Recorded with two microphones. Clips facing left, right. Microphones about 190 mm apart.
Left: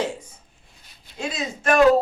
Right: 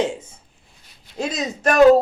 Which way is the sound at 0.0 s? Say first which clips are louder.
Right 4 dB; 25° right (ahead or behind).